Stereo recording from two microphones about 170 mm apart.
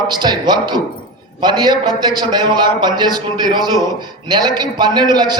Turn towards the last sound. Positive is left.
turn(degrees=-25)  # may be behind; listen again after turning